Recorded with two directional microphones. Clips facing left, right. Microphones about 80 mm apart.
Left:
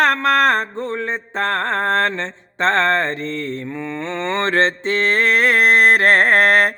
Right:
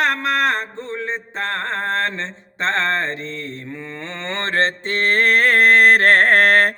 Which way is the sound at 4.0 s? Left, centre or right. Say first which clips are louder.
Left 6 dB; left.